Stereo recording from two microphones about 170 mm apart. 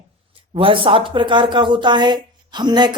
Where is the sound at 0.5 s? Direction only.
30° right (ahead or behind).